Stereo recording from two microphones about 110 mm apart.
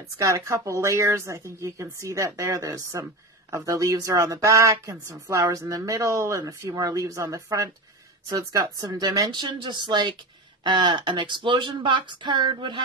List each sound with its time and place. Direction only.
0.2 s speech: 30° right (ahead or behind); by 12.8 s 45° right (ahead or behind)